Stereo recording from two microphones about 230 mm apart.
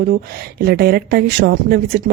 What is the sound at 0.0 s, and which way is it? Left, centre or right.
Speech, right.